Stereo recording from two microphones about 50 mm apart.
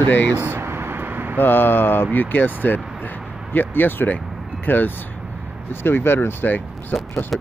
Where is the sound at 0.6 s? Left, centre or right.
Right.